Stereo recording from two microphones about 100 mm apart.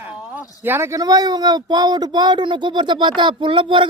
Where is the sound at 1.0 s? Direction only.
40° right (ahead or behind).